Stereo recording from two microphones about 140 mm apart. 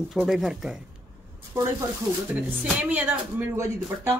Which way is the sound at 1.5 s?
20° right (ahead or behind).